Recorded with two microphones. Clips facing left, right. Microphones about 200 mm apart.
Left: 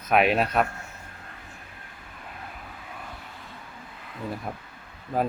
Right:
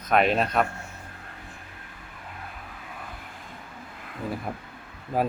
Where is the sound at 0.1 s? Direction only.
5° left (ahead or behind).